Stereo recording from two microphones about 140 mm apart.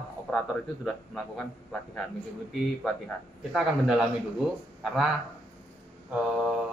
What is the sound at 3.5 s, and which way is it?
Speech, 5° right (ahead or behind).